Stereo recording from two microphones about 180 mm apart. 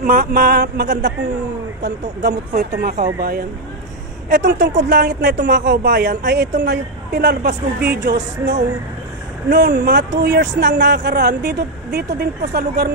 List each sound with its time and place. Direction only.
0.0 s speech: 55° right (ahead or behind)
2.5 s speech: 50° right (ahead or behind)
4.3 s a woman's voice: 70° right (ahead or behind)
9.6 s a woman's voice: 60° right (ahead or behind)